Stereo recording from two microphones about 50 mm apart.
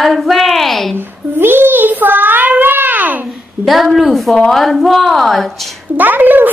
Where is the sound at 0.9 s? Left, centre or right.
Right.